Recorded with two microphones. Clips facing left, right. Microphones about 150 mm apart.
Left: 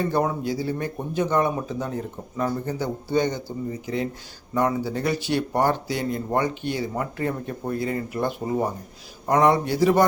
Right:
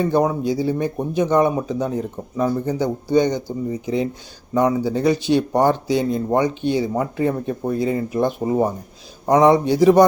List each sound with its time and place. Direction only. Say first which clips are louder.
0.1 s speech: right 5 dB; 15° right (ahead or behind)